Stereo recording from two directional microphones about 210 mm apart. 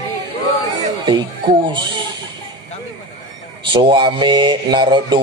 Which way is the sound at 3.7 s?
20° right (ahead or behind).